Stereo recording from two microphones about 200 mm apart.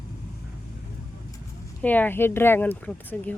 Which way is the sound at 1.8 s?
10° left (ahead or behind).